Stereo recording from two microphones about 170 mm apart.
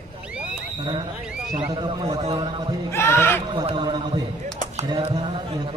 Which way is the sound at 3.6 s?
25° right (ahead or behind).